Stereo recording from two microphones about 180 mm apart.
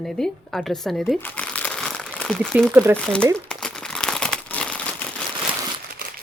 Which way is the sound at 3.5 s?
5° left (ahead or behind).